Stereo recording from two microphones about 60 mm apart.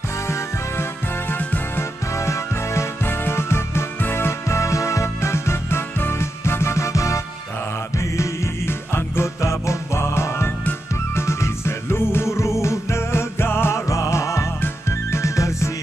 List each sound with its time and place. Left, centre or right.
0.3 s music: left
1.8 s music: left
8.9 s music: left
9.4 s music: left